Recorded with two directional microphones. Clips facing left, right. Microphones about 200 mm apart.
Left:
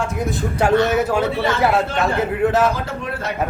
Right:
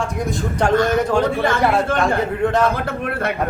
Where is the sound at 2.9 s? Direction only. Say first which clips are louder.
Right 4 dB; 55° right (ahead or behind).